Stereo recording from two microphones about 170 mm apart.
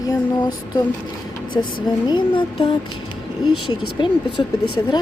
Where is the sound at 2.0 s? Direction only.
25° left (ahead or behind).